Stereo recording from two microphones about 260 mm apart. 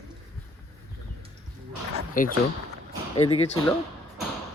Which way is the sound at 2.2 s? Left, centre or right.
Left.